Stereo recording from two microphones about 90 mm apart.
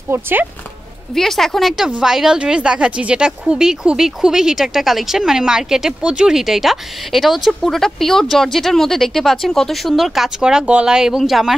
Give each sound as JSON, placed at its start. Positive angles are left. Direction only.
{"t": 0.1, "sound": "speech", "side_deg": -20}
{"t": 1.1, "sound": "speech", "side_deg": 5}